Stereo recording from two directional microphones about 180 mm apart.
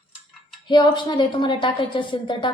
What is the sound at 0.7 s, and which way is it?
A woman's voice, 25° left (ahead or behind).